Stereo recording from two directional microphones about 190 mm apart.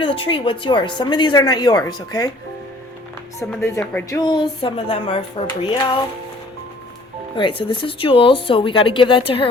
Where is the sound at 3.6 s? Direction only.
10° left (ahead or behind).